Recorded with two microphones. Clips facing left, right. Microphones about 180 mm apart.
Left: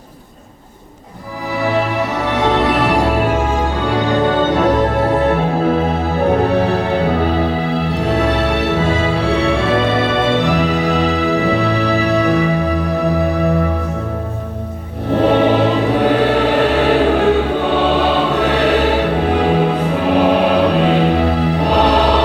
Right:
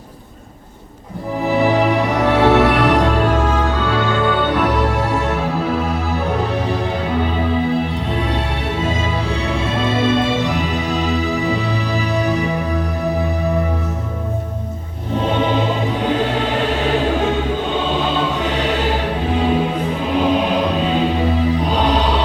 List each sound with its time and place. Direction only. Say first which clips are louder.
1.5 s music: right 3 dB; 20° right (ahead or behind)
2.1 s music: right 3 dB; 10° right (ahead or behind)
3.8 s music: left 5 dB; 15° left (ahead or behind)
4.7 s music: left 4 dB; 50° left (ahead or behind); by 7.3 s 65° left (ahead or behind)
7.9 s music: left 5 dB; 75° left (ahead or behind)
15.1 s music: left 6 dB; 70° left (ahead or behind)